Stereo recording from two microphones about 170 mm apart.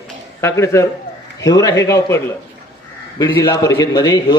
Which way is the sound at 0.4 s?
15° left (ahead or behind).